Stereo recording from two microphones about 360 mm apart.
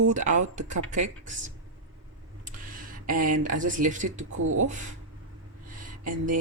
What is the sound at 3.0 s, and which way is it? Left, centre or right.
Speech, right.